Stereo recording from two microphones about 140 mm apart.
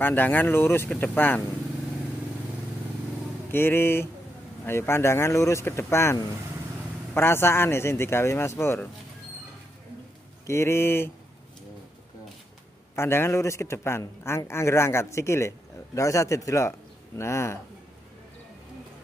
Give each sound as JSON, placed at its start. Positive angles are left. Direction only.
{"t": 0.0, "sound": "speech", "side_deg": 15}
{"t": 3.5, "sound": "a man's voice", "side_deg": 15}
{"t": 7.2, "sound": "speech", "side_deg": 15}
{"t": 10.4, "sound": "speech", "side_deg": 20}
{"t": 12.9, "sound": "a man's voice", "side_deg": 15}